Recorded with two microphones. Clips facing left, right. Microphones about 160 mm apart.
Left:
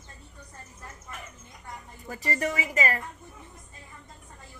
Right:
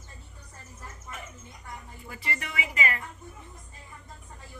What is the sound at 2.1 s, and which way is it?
Speech, 40° left (ahead or behind).